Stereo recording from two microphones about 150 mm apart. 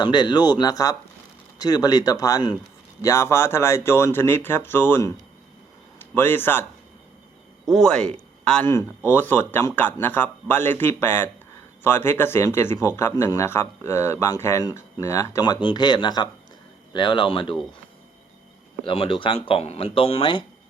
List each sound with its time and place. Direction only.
0.0 s a man's voice: 30° left (ahead or behind)
6.1 s a man's voice: 15° left (ahead or behind)
7.7 s a man's voice: 5° left (ahead or behind); by 17.6 s 35° left (ahead or behind)
18.9 s speech: 35° left (ahead or behind)